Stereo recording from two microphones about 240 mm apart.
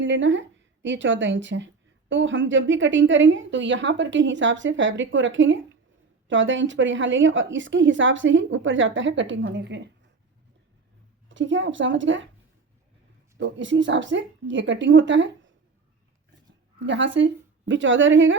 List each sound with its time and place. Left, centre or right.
0.0 s a woman's voice: right
11.3 s a woman's voice: right
13.4 s a woman's voice: right
16.8 s a woman's voice: right